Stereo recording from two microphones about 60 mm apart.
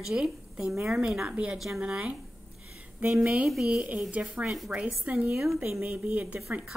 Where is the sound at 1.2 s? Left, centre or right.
Right.